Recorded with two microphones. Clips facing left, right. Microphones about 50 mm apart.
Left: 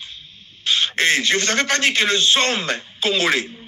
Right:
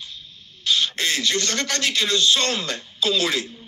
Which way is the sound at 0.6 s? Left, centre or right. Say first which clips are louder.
Left 4 dB; left.